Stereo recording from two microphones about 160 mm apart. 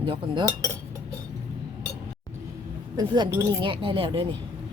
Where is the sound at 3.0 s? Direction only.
25° right (ahead or behind).